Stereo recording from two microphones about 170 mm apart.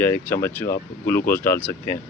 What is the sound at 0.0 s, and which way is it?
Speech, 15° left (ahead or behind).